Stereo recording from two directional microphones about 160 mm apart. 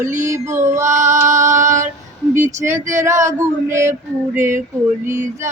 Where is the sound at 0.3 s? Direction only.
20° right (ahead or behind).